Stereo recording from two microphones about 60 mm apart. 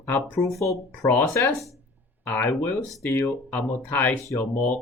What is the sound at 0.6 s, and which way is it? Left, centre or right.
Speech, left.